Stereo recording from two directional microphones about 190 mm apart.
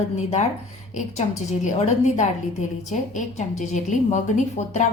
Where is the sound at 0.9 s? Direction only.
35° left (ahead or behind).